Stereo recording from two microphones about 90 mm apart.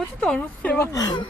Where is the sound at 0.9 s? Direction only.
45° left (ahead or behind).